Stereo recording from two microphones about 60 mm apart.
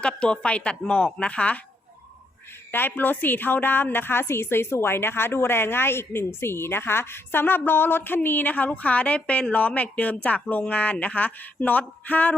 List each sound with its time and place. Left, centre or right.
0.0 s a woman's voice: centre
2.7 s a woman's voice: left
10.7 s a sound: left